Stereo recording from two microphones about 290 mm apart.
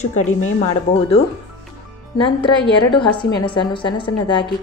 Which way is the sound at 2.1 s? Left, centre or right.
Centre.